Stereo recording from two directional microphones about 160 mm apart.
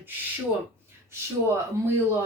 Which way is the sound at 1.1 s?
15° right (ahead or behind).